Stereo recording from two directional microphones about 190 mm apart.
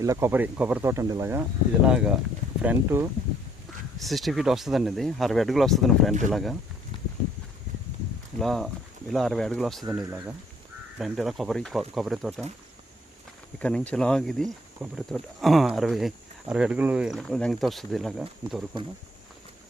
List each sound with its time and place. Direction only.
0.0 s speech: 15° right (ahead or behind)
3.9 s speech: centre (ahead or behind)
6.9 s a sound: 25° left (ahead or behind)
8.4 s speech: centre (ahead or behind)
9.9 s speech: 10° right (ahead or behind)
13.6 s speech: 5° left (ahead or behind)